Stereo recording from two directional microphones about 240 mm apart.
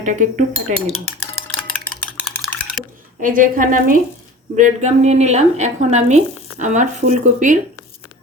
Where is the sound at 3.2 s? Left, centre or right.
Right.